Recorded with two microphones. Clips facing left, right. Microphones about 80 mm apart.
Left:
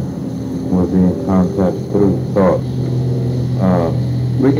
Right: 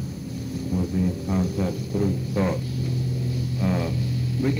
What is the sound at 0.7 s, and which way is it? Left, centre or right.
Music, left.